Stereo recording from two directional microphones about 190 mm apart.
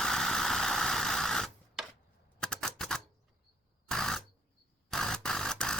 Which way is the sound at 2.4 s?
5° left (ahead or behind).